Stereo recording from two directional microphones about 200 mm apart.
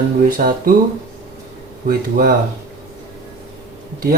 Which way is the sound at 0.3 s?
45° right (ahead or behind).